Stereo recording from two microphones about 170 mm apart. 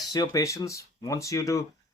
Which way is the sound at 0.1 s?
20° left (ahead or behind).